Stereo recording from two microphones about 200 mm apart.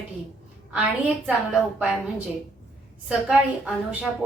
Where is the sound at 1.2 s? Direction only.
5° right (ahead or behind).